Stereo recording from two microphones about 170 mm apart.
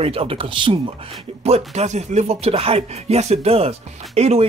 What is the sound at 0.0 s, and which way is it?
Speech, 35° right (ahead or behind).